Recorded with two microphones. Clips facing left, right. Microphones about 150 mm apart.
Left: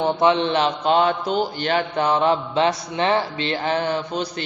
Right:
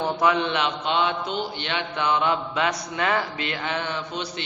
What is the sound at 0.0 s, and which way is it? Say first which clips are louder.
A man's voice: left 4 dB; 25° left (ahead or behind).